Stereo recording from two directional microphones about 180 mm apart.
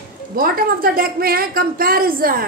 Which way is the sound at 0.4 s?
55° right (ahead or behind).